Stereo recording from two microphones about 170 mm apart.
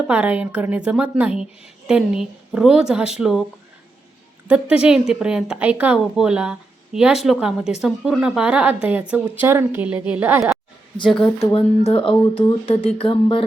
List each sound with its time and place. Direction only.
0.1 s a woman's voice: 10° right (ahead or behind)
4.4 s a woman's voice: 5° right (ahead or behind)
11.2 s speech: 35° left (ahead or behind)